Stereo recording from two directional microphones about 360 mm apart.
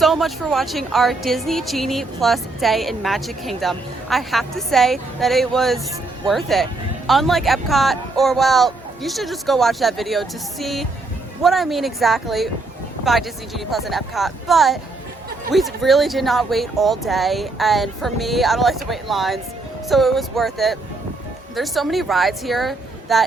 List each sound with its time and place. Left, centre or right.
0.0 s a woman's voice: centre